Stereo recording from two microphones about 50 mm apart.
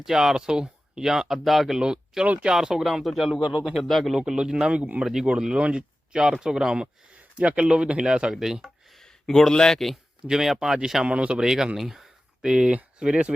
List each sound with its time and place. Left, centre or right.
0.0 s speech: centre
2.2 s speech: right
2.5 s a man's voice: centre
3.4 s speech: centre
3.8 s a man's voice: centre
4.2 s speech: centre
8.6 s speech: centre
10.2 s speech: centre
11.0 s speech: right